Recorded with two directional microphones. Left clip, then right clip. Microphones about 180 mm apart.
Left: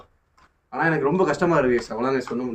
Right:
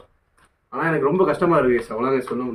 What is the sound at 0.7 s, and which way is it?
Speech, 10° left (ahead or behind).